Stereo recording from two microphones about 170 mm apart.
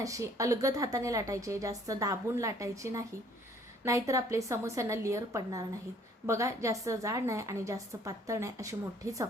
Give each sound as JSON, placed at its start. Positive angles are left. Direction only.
{"t": 0.0, "sound": "a woman's voice", "side_deg": -20}